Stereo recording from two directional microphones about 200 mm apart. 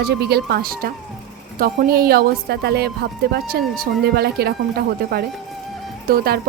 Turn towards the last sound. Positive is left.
turn(degrees=-50)  # may be behind; listen again after turning